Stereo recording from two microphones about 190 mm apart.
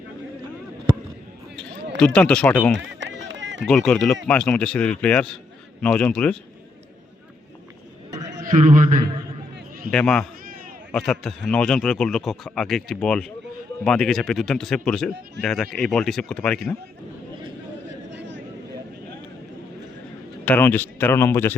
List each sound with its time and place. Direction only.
2.0 s speech: 5° left (ahead or behind)
2.7 s run: 70° right (ahead or behind)
3.7 s speech: 5° left (ahead or behind)
8.5 s a man's voice: 40° right (ahead or behind)
9.9 s speech: 5° left (ahead or behind)
18.1 s a sound: 70° right (ahead or behind)
20.4 s speech: 10° left (ahead or behind)